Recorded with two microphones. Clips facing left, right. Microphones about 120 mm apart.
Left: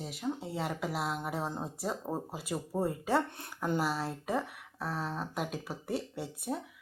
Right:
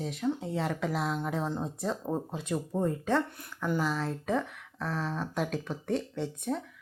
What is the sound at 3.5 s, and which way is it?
Speech, 20° left (ahead or behind).